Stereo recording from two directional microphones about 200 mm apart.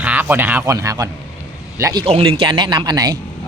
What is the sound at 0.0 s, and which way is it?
A man's voice, 10° right (ahead or behind).